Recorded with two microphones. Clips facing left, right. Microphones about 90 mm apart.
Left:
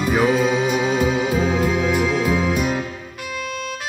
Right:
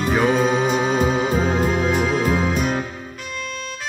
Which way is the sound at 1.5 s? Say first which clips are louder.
Even; 45° right (ahead or behind).